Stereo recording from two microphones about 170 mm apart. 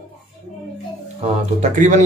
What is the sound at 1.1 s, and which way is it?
Speech, 45° right (ahead or behind).